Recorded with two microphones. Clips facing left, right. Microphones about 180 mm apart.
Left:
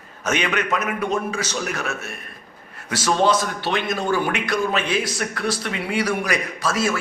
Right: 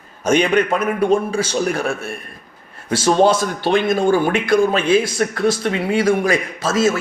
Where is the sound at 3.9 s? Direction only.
25° right (ahead or behind).